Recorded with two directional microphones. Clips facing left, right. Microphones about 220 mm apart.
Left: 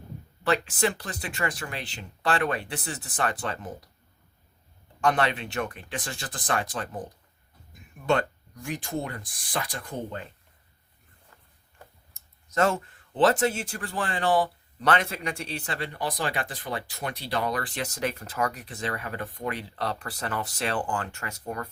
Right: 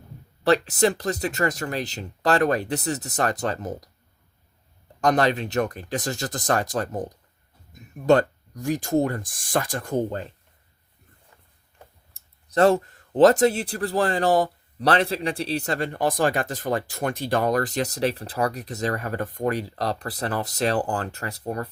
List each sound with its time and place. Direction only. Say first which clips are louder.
0.4 s speech: right 6 dB; 40° right (ahead or behind)
4.9 s speech: right 4 dB; 40° right (ahead or behind)
12.1 s speech: right 5 dB; 35° right (ahead or behind)